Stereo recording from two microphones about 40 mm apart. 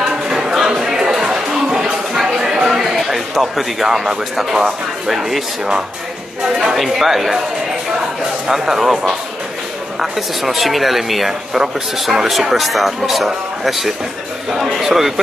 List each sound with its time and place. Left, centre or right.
0.0 s a sound: centre
6.6 s speech: centre
8.5 s a man's voice: centre